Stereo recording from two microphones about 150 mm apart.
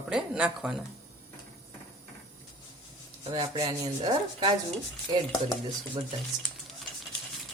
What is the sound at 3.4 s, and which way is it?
Speech, 25° right (ahead or behind).